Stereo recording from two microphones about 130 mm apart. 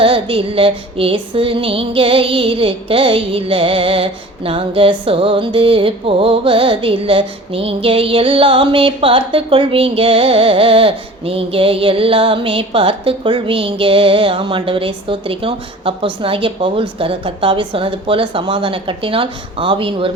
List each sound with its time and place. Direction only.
0.0 s music: 40° right (ahead or behind)
17.0 s speech: 40° right (ahead or behind)